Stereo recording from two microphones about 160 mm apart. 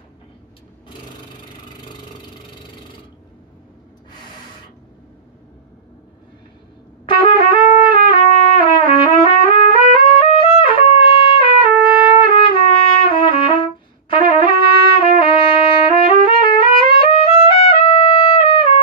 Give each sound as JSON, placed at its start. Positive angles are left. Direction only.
{"t": 7.1, "sound": "trumpet", "side_deg": 35}
{"t": 16.1, "sound": "music", "side_deg": 30}